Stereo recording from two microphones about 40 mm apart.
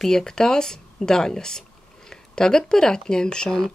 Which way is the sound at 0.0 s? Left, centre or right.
Centre.